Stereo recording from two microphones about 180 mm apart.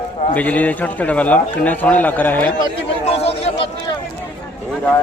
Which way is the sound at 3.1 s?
35° left (ahead or behind).